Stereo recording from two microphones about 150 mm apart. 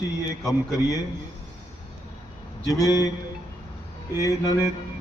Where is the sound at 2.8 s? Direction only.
25° left (ahead or behind).